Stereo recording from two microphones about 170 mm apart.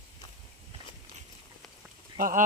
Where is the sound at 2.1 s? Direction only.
55° right (ahead or behind).